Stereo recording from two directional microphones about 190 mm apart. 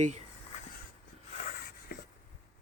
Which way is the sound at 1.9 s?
50° left (ahead or behind).